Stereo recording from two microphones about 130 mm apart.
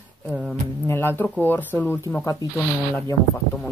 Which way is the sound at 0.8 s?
20° left (ahead or behind).